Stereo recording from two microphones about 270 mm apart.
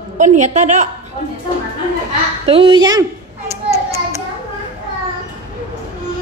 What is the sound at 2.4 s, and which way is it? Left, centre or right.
Speech, centre.